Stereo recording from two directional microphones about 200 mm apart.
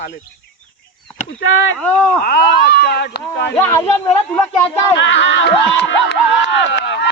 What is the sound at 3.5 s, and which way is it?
Speech, 10° left (ahead or behind).